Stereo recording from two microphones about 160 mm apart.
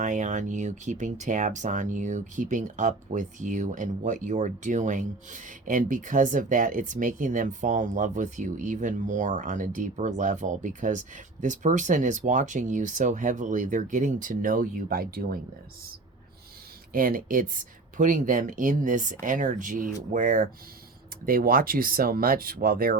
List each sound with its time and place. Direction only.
0.0 s speech: 50° right (ahead or behind); by 15.4 s 70° right (ahead or behind)
16.9 s speech: 60° right (ahead or behind)